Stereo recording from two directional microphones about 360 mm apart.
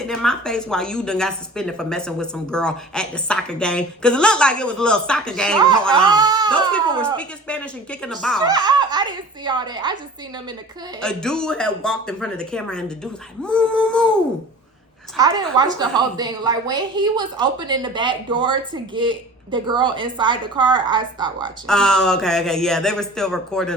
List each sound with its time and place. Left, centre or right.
0.0 s a woman's voice: centre
6.1 s speech: centre
7.2 s a woman's voice: centre
8.4 s a woman's voice: centre
11.0 s a woman's voice: centre
15.1 s a woman's voice: centre
21.7 s a woman's voice: centre